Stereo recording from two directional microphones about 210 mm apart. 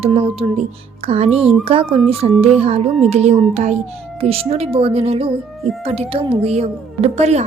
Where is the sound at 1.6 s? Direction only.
25° right (ahead or behind).